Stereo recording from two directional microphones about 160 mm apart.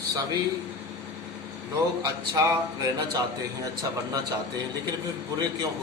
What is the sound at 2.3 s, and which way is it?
Speech, 20° right (ahead or behind).